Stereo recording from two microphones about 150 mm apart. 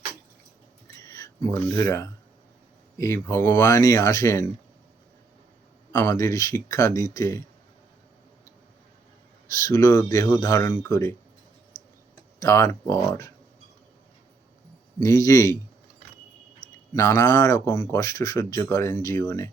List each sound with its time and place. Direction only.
1.0 s speech: 20° left (ahead or behind)
5.9 s speech: 20° left (ahead or behind)
9.6 s speech: 20° left (ahead or behind)
12.4 s speech: 20° left (ahead or behind)
15.0 s speech: 20° left (ahead or behind)
16.9 s speech: 15° left (ahead or behind)